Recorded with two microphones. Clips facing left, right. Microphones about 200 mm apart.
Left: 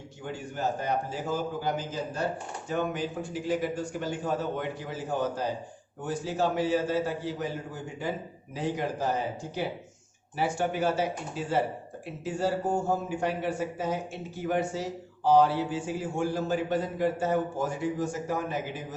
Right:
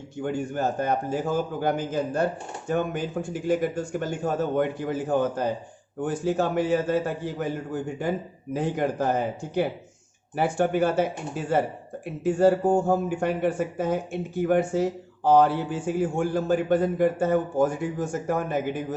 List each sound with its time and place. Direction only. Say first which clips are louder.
0.2 s speech: right 7 dB; 50° right (ahead or behind)